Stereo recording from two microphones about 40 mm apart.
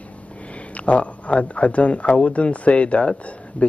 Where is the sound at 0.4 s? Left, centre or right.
Left.